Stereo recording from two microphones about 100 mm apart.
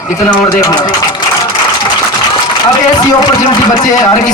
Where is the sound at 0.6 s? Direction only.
40° left (ahead or behind).